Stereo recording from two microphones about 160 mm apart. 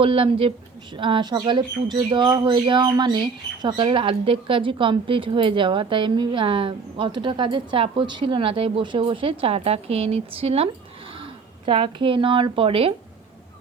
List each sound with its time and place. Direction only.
0.0 s speech: 35° right (ahead or behind)